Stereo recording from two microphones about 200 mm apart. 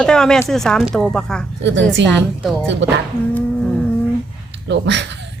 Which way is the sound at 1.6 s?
65° right (ahead or behind).